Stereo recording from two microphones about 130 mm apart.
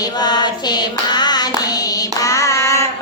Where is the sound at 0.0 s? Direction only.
30° left (ahead or behind).